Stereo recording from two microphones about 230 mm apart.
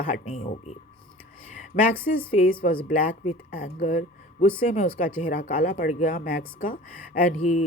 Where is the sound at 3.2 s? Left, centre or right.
Left.